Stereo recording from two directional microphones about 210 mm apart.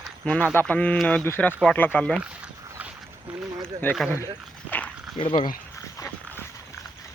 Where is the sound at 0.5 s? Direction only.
10° left (ahead or behind).